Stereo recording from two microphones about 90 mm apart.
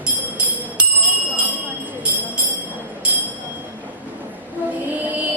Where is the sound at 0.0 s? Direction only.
15° right (ahead or behind).